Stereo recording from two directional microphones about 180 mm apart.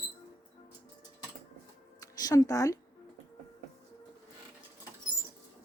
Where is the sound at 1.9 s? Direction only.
20° left (ahead or behind).